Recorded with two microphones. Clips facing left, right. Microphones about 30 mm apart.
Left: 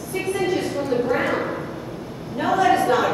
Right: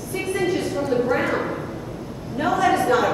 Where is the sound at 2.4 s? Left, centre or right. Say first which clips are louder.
Left 1 dB; centre.